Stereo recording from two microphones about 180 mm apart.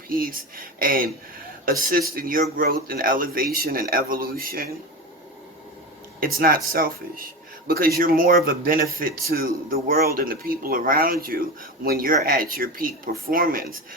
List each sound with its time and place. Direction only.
0.1 s speech: 50° right (ahead or behind)
6.1 s speech: 55° right (ahead or behind)